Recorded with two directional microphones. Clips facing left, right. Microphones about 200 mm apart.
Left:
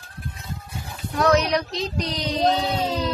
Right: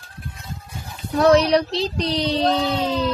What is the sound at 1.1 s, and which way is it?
Speech, 30° right (ahead or behind).